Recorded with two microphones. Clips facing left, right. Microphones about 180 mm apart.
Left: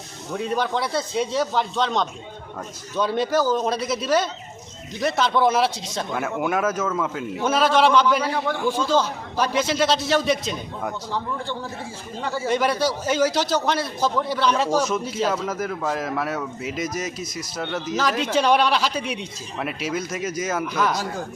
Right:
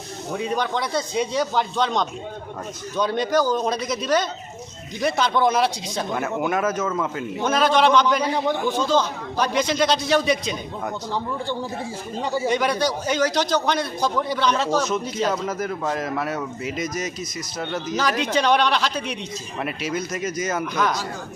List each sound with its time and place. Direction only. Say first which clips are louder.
0.3 s a man's voice: left 1 dB; centre (ahead or behind)
8.3 s a man's voice: right 2 dB; 20° right (ahead or behind)
8.9 s a man's voice: even; 5° left (ahead or behind)
12.2 s speech: right 3 dB; 15° right (ahead or behind)
12.5 s a man's voice: left 2 dB; 5° left (ahead or behind)